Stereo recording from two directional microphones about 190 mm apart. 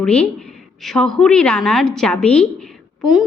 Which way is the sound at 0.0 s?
5° left (ahead or behind).